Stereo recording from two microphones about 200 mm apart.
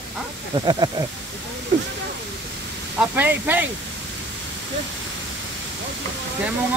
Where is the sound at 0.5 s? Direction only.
20° right (ahead or behind).